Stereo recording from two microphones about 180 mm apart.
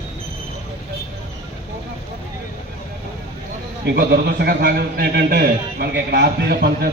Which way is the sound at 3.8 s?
65° right (ahead or behind).